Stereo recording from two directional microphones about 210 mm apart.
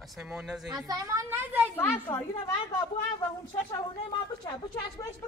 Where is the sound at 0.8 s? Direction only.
15° right (ahead or behind).